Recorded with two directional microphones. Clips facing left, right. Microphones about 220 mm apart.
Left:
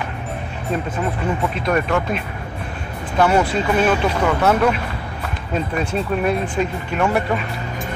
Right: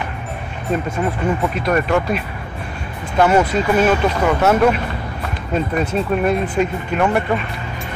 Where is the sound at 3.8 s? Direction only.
5° right (ahead or behind).